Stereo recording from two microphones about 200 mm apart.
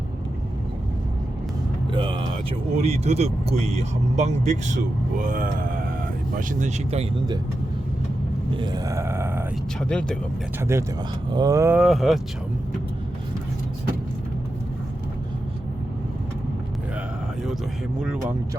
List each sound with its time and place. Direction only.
1.9 s music: 25° right (ahead or behind)
2.8 s speech: 30° right (ahead or behind)
8.5 s grunt: 20° right (ahead or behind)
9.9 s speech: 5° left (ahead or behind)
10.6 s grunt: 15° right (ahead or behind)
11.8 s speech: centre (ahead or behind)
18.0 s speech: 5° right (ahead or behind)